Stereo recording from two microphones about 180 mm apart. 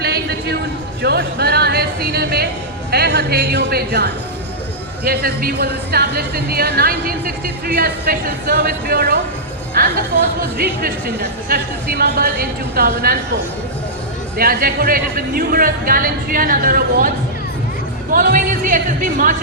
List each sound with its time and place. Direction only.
0.0 s a sound: 60° right (ahead or behind)
1.0 s a woman's voice: 65° right (ahead or behind)
14.3 s speech: 55° right (ahead or behind)
18.1 s speech: 50° right (ahead or behind)